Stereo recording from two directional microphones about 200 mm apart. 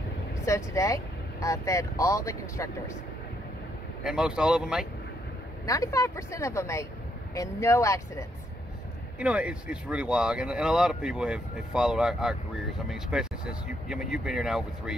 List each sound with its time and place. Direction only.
0.5 s speech: 15° left (ahead or behind)
4.0 s speech: 5° right (ahead or behind)
5.7 s speech: 15° left (ahead or behind)
9.2 s speech: 5° right (ahead or behind)